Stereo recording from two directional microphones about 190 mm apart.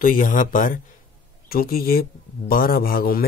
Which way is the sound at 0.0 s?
45° left (ahead or behind).